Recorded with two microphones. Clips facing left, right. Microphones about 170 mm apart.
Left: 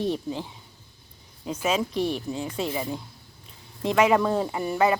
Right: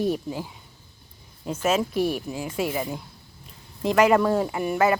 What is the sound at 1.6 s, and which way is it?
Speech, 5° right (ahead or behind).